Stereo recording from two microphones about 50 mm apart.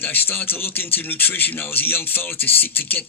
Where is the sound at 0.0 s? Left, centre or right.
Left.